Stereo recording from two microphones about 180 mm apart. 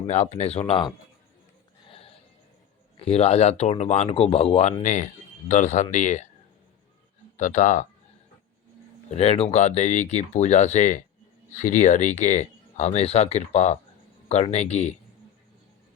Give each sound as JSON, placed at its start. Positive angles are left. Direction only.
{"t": 0.1, "sound": "speech", "side_deg": 35}
{"t": 3.0, "sound": "speech", "side_deg": 35}
{"t": 7.3, "sound": "speech", "side_deg": 45}
{"t": 9.0, "sound": "speech", "side_deg": 35}